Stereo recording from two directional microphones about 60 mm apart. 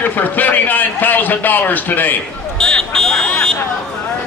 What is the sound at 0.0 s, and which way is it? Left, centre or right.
A man's voice, left.